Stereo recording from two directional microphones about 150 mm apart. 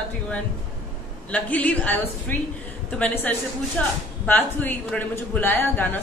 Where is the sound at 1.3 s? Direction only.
10° left (ahead or behind).